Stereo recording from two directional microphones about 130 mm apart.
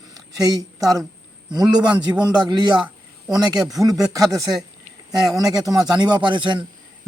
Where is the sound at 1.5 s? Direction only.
35° right (ahead or behind).